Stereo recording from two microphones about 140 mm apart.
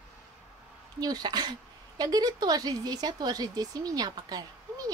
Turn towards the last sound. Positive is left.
turn(degrees=-25)  # may be behind; listen again after turning